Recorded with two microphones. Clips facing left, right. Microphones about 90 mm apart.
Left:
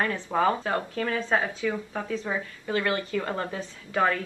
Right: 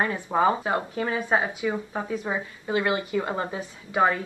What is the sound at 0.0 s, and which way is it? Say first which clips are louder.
Speech: right 2 dB; 20° right (ahead or behind).